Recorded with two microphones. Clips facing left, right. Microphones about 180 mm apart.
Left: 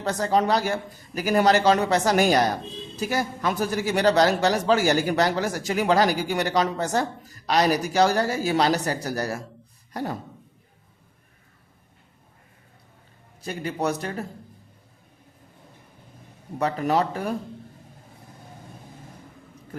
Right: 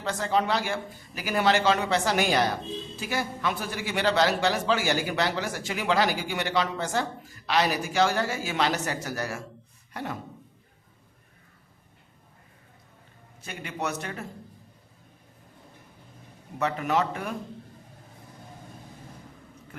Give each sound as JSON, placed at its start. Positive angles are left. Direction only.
{"t": 0.0, "sound": "a man's voice", "side_deg": 40}
{"t": 9.9, "sound": "dog", "side_deg": 35}
{"t": 13.4, "sound": "a man's voice", "side_deg": 35}
{"t": 16.6, "sound": "a man's voice", "side_deg": 35}